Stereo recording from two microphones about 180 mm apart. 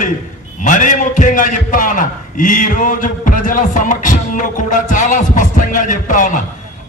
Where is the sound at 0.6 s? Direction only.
45° left (ahead or behind).